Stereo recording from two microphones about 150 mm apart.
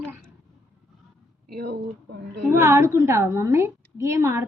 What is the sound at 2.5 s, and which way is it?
A woman's voice, 15° right (ahead or behind).